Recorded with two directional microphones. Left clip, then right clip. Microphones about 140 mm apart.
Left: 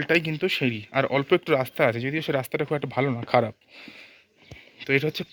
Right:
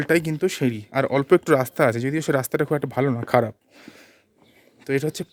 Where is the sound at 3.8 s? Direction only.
45° right (ahead or behind).